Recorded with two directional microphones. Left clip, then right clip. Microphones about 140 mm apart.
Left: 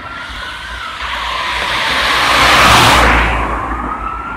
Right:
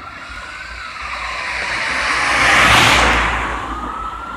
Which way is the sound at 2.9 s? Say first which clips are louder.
Left 3 dB; 55° right (ahead or behind).